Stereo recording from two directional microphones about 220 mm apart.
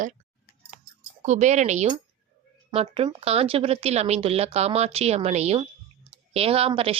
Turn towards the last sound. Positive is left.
turn(degrees=-25)  # may be behind; listen again after turning